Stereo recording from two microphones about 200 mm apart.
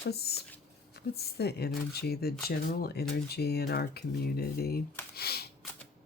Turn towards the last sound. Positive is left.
turn(degrees=50)  # may be behind; listen again after turning